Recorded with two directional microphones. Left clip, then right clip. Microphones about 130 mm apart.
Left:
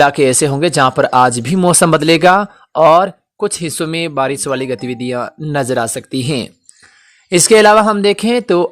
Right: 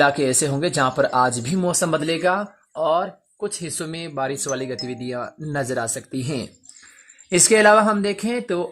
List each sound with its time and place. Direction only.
0.0 s speech: 35° left (ahead or behind)
1.6 s speech: 60° left (ahead or behind)
4.3 s speech: 35° left (ahead or behind)
7.3 s speech: 25° left (ahead or behind)